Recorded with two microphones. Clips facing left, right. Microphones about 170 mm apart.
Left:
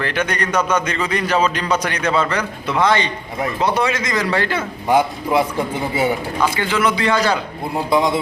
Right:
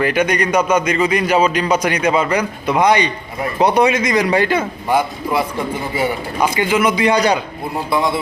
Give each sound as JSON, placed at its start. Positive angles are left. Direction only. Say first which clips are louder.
{"t": 0.0, "sound": "a man's voice", "louder": "right 5 dB", "side_deg": -10}
{"t": 4.9, "sound": "a man's voice", "louder": "left 3 dB", "side_deg": 15}
{"t": 6.4, "sound": "a man's voice", "louder": "right 4 dB", "side_deg": -15}
{"t": 7.9, "sound": "a man's voice", "louder": "left 1 dB", "side_deg": 15}